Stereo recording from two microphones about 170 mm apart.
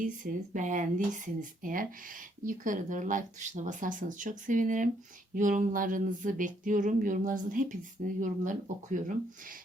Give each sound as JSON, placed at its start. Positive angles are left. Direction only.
{"t": 0.0, "sound": "speech", "side_deg": -50}